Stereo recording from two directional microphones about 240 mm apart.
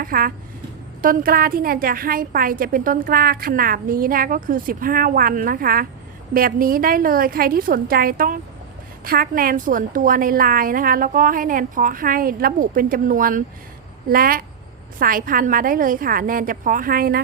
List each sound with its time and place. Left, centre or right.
0.0 s a woman's voice: right